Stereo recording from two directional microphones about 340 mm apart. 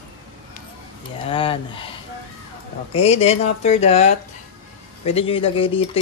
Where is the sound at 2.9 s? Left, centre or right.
Centre.